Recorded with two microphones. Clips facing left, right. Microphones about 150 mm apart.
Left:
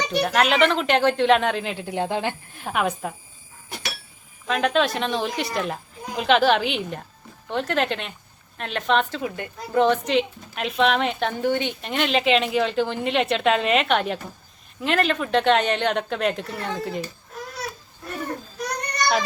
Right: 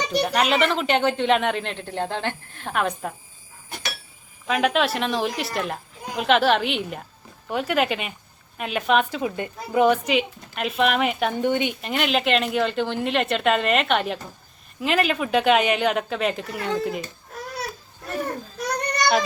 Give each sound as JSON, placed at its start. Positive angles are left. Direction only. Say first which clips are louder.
{"t": 0.3, "sound": "speech", "louder": "left 3 dB", "side_deg": 0}
{"t": 4.4, "sound": "speech", "louder": "even", "side_deg": -5}
{"t": 9.2, "sound": "speech", "louder": "right 3 dB", "side_deg": -20}
{"t": 9.7, "sound": "speech", "louder": "even", "side_deg": -10}
{"t": 11.3, "sound": "speech", "louder": "even", "side_deg": -15}
{"t": 11.8, "sound": "speech", "louder": "even", "side_deg": 0}